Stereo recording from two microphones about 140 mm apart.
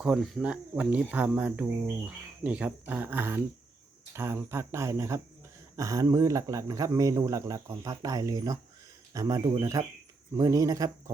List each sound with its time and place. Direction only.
0.0 s speech: 5° right (ahead or behind); by 11.1 s 25° right (ahead or behind)